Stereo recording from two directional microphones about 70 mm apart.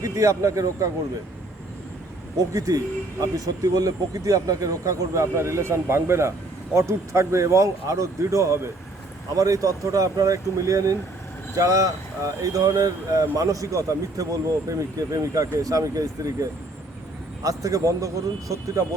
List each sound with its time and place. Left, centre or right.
0.0 s speech: right
2.4 s speech: right